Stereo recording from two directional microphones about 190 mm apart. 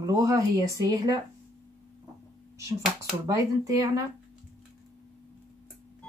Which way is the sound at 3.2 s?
15° right (ahead or behind).